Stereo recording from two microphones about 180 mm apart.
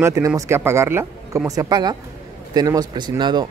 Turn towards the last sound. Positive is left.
turn(degrees=-25)  # may be behind; listen again after turning